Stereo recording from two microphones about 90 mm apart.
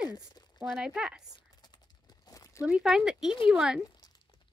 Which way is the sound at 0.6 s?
5° right (ahead or behind).